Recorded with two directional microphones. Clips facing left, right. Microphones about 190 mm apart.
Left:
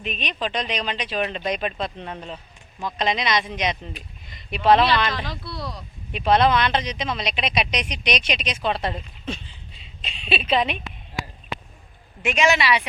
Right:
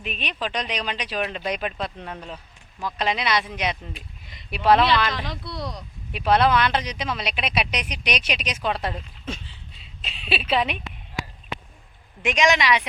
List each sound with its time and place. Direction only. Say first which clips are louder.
0.0 s speech: left 2 dB; 10° right (ahead or behind)
2.1 s speech: left 2 dB; 25° left (ahead or behind)
3.0 s speech: left 1 dB; 10° right (ahead or behind)
5.5 s speech: right 1 dB; 20° right (ahead or behind)
6.1 s a woman's voice: left 1 dB; 10° right (ahead or behind)
12.2 s speech: even; 15° right (ahead or behind)